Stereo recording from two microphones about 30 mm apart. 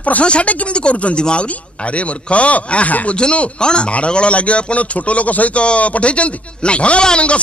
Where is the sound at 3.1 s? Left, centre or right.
Left.